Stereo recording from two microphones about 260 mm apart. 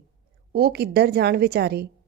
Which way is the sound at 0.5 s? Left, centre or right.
Right.